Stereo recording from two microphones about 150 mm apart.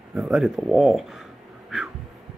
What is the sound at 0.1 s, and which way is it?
Speech, 5° right (ahead or behind).